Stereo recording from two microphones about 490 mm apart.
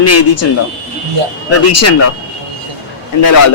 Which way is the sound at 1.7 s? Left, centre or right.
Left.